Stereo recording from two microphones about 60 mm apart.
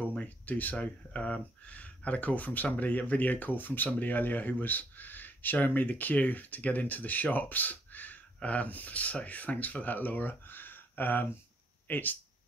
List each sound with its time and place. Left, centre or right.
0.0 s speech: left